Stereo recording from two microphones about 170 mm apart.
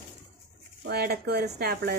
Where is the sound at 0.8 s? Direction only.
70° right (ahead or behind).